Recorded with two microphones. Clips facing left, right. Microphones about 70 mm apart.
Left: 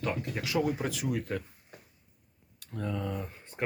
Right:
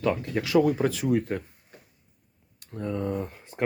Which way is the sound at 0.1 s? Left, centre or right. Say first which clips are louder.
Right 8 dB; right.